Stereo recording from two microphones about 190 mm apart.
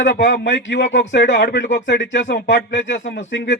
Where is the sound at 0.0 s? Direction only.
75° left (ahead or behind).